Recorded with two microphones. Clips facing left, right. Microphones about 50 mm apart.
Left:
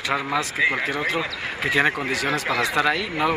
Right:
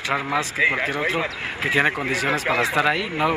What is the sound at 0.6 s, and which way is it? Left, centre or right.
Speech, right.